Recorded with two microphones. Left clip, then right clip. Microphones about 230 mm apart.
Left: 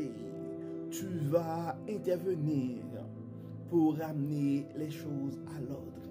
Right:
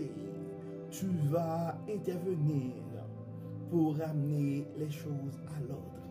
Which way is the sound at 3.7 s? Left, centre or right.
Left.